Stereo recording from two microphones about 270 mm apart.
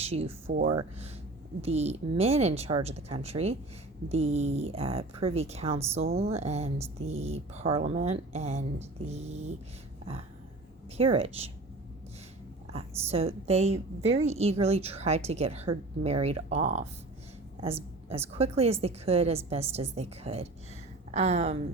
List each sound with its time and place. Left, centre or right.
0.0 s a woman's voice: right
10.9 s a woman's voice: right
12.7 s a woman's voice: right
17.6 s a sound: right
18.3 s a woman's voice: right